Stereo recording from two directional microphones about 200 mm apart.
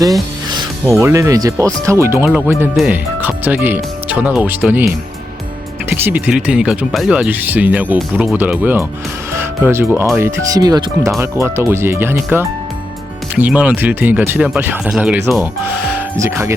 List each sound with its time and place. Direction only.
0.0 s speech: 15° right (ahead or behind)
5.9 s speech: 10° right (ahead or behind)
16.1 s speech: 15° right (ahead or behind)